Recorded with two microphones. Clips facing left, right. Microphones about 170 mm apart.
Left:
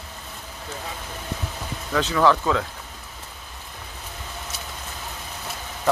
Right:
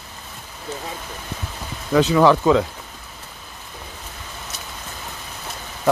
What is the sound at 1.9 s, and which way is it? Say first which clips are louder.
Speech: right 5 dB; 15° right (ahead or behind).